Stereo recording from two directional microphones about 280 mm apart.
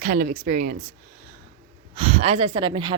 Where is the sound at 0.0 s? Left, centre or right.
Right.